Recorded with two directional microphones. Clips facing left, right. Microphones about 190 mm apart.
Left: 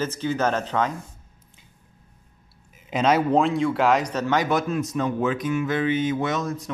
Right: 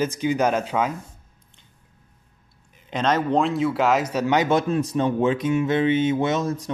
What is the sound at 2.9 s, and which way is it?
A man's voice, 5° left (ahead or behind).